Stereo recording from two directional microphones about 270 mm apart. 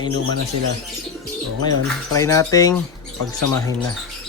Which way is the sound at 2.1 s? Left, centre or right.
Centre.